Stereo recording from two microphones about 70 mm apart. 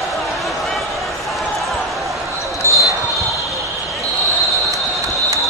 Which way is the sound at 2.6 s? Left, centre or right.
Left.